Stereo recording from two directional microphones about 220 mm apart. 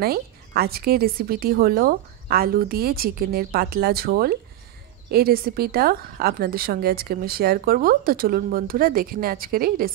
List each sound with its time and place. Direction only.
0.0 s a woman's voice: 45° right (ahead or behind)